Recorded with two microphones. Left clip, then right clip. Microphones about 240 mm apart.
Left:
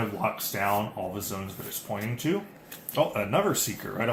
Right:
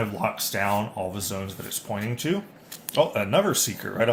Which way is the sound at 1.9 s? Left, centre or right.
Right.